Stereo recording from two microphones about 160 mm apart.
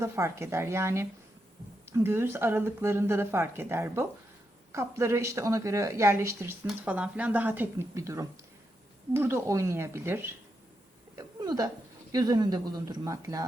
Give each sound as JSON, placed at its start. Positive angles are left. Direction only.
{"t": 0.0, "sound": "speech", "side_deg": -15}
{"t": 11.4, "sound": "speech", "side_deg": -25}